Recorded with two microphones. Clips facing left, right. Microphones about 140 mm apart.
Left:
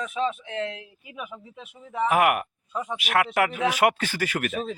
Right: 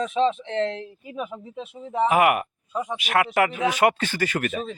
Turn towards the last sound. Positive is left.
turn(degrees=0)  # may be behind; listen again after turning